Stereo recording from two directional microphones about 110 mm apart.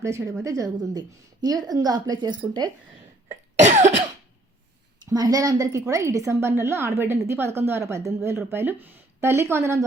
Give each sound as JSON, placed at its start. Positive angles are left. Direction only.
{"t": 0.0, "sound": "a woman's voice", "side_deg": -25}
{"t": 3.6, "sound": "cough", "side_deg": -90}
{"t": 5.0, "sound": "a woman's voice", "side_deg": -35}